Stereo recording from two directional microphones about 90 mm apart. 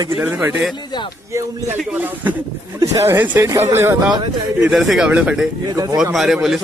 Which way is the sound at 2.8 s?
35° right (ahead or behind).